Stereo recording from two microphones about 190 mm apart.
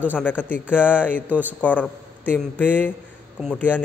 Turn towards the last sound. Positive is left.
turn(degrees=10)  # may be behind; listen again after turning